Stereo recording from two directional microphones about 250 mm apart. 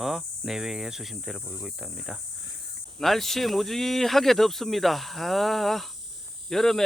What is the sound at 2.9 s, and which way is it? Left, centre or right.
Speech, centre.